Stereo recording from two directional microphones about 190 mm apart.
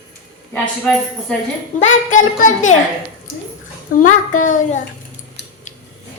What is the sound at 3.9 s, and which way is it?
Speech, 45° left (ahead or behind).